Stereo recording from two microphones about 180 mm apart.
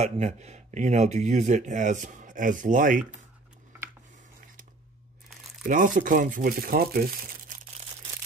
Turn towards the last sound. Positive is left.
turn(degrees=-55)  # may be behind; listen again after turning